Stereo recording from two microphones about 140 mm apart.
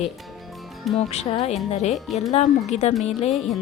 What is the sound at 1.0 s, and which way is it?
Speech, 50° left (ahead or behind).